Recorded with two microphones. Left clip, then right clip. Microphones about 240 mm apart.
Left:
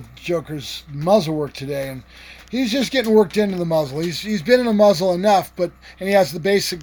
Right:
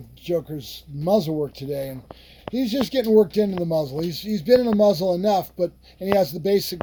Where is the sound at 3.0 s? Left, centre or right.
Left.